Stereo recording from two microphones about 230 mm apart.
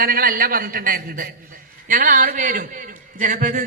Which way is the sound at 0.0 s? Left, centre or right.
Right.